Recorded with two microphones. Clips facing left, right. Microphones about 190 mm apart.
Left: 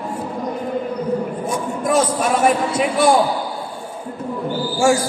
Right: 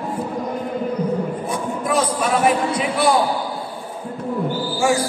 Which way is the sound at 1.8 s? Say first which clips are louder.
Left 3 dB; 45° left (ahead or behind).